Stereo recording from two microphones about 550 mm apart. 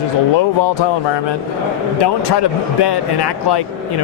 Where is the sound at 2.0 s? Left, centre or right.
Left.